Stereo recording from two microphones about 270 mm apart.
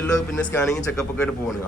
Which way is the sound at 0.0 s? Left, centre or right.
Centre.